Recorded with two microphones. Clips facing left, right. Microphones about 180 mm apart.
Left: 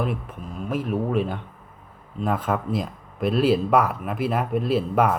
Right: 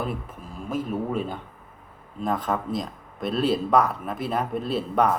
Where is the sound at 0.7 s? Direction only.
70° left (ahead or behind).